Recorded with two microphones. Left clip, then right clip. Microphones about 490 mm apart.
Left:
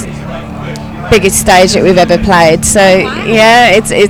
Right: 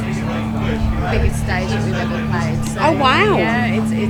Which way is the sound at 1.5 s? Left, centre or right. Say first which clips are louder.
Left 19 dB; left.